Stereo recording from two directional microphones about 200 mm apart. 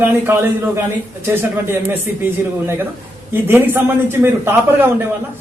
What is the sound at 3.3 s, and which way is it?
Speech, 10° right (ahead or behind).